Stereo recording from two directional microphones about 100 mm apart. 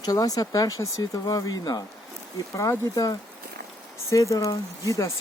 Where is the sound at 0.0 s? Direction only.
35° left (ahead or behind).